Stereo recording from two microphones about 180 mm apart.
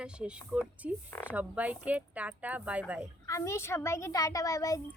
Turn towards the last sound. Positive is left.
turn(degrees=20)  # may be behind; listen again after turning